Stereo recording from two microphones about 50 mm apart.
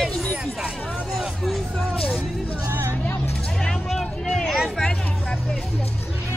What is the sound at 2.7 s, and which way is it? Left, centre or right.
Music, right.